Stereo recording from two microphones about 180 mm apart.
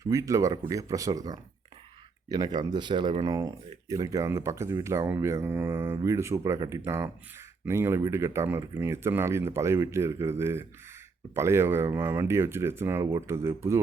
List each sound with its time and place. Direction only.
0.0 s speech: 15° right (ahead or behind)